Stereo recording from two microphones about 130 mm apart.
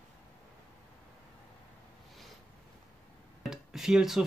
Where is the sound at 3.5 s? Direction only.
5° right (ahead or behind).